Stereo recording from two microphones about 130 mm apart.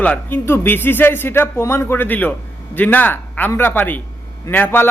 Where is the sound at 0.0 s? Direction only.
15° left (ahead or behind).